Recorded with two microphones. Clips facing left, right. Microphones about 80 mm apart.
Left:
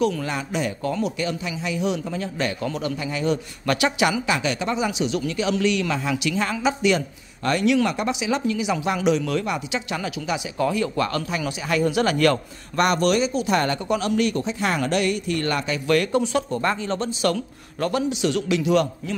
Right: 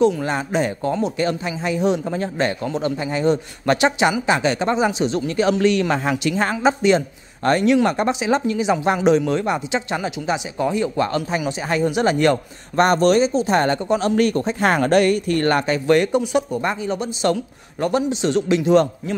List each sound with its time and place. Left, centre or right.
0.0 s speech: right
12.8 s speech: right
14.1 s speech: right
16.0 s speech: centre